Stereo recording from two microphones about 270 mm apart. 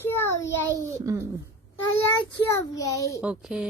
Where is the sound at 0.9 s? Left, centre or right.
Centre.